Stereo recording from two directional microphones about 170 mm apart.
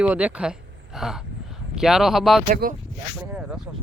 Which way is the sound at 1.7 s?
Centre (ahead or behind).